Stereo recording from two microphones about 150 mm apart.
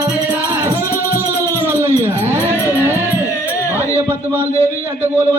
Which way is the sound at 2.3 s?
15° right (ahead or behind).